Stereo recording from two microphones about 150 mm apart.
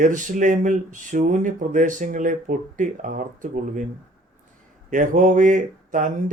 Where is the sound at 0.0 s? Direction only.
60° right (ahead or behind).